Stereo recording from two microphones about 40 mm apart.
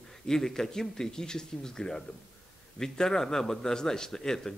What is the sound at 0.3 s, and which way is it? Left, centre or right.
Speech, centre.